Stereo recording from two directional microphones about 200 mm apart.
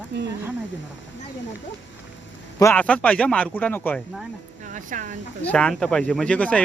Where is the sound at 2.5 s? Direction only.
10° left (ahead or behind).